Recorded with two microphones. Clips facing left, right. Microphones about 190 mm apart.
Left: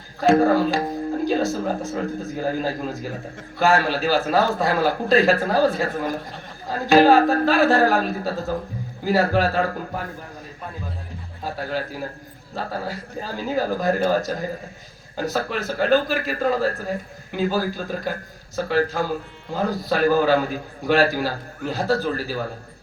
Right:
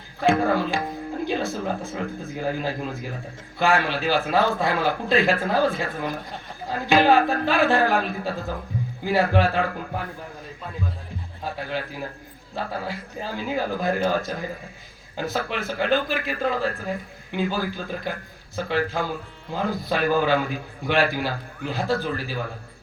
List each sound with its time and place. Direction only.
0.2 s speech: 40° left (ahead or behind)
11.5 s speech: 40° left (ahead or behind)